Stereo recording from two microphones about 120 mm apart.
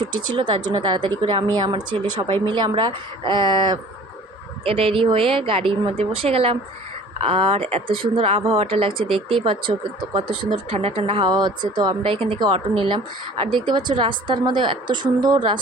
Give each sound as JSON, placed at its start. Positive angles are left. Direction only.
{"t": 0.3, "sound": "speech", "side_deg": -40}
{"t": 4.6, "sound": "speech", "side_deg": -50}